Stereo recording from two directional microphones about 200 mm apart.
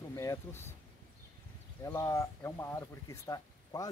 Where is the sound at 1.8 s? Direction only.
15° left (ahead or behind).